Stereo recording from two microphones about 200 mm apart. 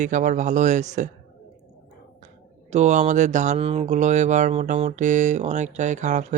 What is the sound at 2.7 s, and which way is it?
Speech, 35° right (ahead or behind).